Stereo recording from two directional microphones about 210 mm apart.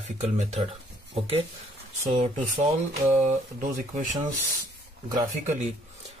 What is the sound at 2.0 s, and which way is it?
Speech, 30° right (ahead or behind).